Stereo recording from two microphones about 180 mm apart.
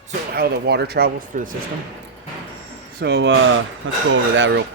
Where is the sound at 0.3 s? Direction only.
60° right (ahead or behind).